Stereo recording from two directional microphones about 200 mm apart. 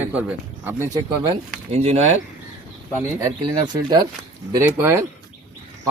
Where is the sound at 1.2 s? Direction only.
30° right (ahead or behind).